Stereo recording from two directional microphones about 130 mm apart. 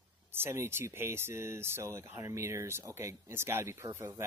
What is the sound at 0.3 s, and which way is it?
Speech, 20° right (ahead or behind).